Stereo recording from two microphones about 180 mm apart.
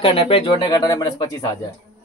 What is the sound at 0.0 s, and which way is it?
A man's voice, 30° left (ahead or behind).